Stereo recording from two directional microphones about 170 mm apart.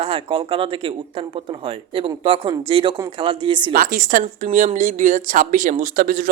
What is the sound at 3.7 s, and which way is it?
A woman's voice, 55° right (ahead or behind).